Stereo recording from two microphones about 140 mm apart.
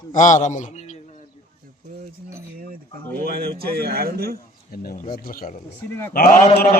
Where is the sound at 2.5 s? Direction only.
90° right.